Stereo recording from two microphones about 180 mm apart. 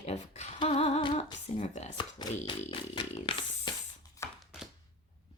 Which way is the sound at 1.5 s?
40° left (ahead or behind).